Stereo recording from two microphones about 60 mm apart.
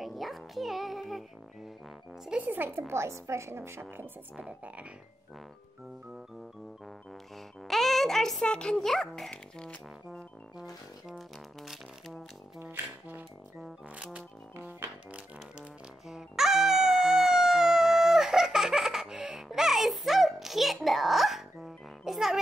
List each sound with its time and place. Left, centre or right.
0.0 s music: centre
2.3 s speech: right
2.9 s a woman's voice: right
4.4 s speech: right
7.6 s music: centre
8.4 s a child's voice: centre
9.3 s a child's voice: centre
11.1 s music: centre
14.8 s music: right
16.1 s a sound: centre